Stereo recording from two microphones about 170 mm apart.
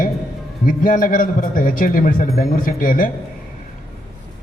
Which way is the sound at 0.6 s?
50° left (ahead or behind).